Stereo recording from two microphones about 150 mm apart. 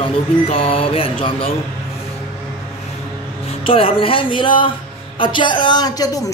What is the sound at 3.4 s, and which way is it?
Speech, 35° left (ahead or behind).